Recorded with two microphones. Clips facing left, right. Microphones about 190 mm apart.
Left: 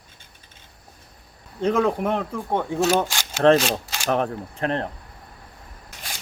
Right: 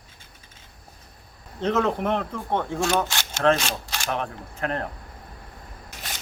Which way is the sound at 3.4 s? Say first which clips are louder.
Left 5 dB; 35° left (ahead or behind).